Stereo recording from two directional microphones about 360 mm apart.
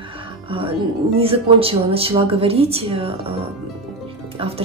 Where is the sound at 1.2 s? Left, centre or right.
Centre.